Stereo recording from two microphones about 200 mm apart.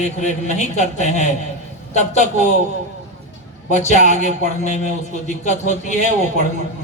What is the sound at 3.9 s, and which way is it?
Speech, 35° left (ahead or behind).